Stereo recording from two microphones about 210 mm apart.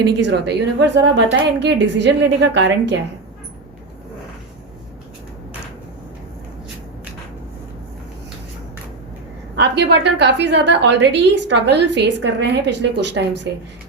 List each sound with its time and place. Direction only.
0.0 s a woman's voice: 55° right (ahead or behind)
9.6 s a woman's voice: 55° right (ahead or behind)